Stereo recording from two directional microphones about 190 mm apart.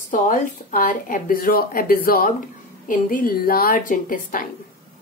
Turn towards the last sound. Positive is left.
turn(degrees=45)  # may be behind; listen again after turning